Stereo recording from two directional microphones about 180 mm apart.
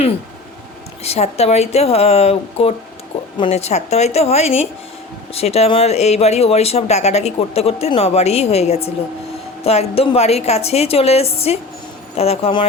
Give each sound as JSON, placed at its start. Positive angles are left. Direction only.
{"t": 1.0, "sound": "speech", "side_deg": 35}